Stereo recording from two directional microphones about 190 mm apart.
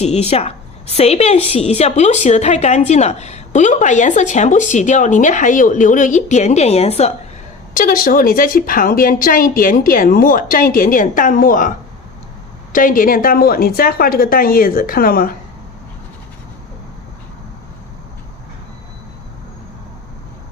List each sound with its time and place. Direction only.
0.0 s a woman's voice: 35° left (ahead or behind)
7.7 s speech: 45° left (ahead or behind)
12.7 s speech: 45° left (ahead or behind)